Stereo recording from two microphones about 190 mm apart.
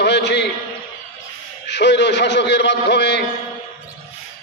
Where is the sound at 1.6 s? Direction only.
65° left (ahead or behind).